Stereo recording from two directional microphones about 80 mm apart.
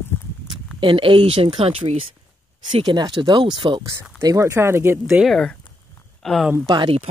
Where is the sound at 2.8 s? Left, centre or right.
Right.